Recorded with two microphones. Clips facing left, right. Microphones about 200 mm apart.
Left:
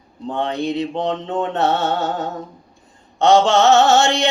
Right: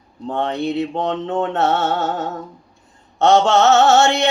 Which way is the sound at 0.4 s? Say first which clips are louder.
Even; 15° left (ahead or behind).